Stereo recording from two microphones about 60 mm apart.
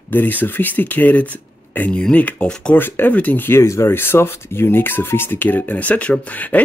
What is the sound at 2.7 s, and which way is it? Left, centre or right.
Speech, left.